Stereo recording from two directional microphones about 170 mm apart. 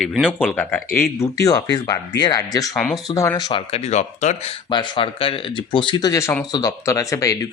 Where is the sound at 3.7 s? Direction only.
40° left (ahead or behind).